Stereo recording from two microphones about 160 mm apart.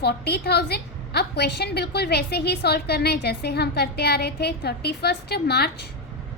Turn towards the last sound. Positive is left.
turn(degrees=90)